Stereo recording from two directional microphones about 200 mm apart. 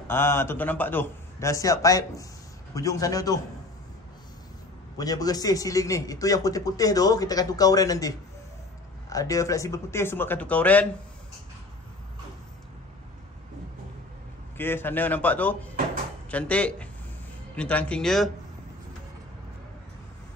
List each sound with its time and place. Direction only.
0.1 s a man's voice: 10° left (ahead or behind)
4.9 s a man's voice: 20° left (ahead or behind)
9.1 s a man's voice: 15° left (ahead or behind)
14.6 s a man's voice: 10° left (ahead or behind)